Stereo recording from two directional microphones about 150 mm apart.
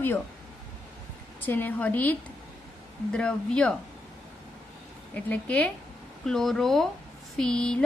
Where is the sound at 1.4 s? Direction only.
15° left (ahead or behind).